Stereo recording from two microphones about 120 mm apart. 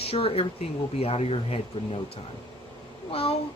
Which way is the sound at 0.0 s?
55° left (ahead or behind).